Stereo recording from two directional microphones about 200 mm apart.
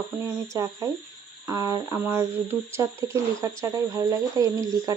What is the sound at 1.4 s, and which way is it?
Speech, 15° right (ahead or behind).